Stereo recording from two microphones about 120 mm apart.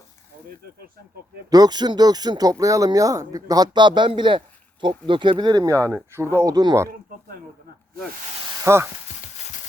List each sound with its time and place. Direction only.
1.5 s speech: 35° right (ahead or behind)
8.6 s speech: 20° right (ahead or behind)